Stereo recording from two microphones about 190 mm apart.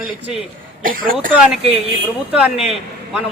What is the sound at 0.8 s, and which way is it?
Speech, 45° right (ahead or behind).